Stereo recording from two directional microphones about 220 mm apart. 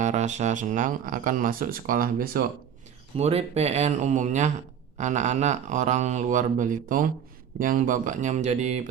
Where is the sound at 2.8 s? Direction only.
30° right (ahead or behind).